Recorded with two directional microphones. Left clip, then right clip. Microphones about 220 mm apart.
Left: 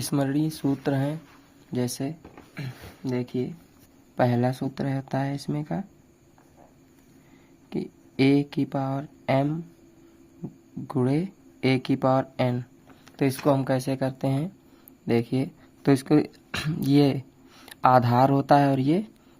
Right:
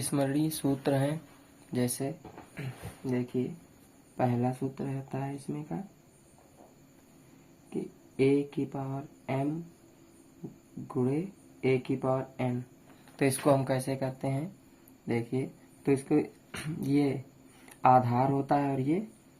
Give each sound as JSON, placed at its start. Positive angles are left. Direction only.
{"t": 0.0, "sound": "speech", "side_deg": 35}
{"t": 7.7, "sound": "speech", "side_deg": 55}
{"t": 10.8, "sound": "speech", "side_deg": 50}
{"t": 13.1, "sound": "speech", "side_deg": 35}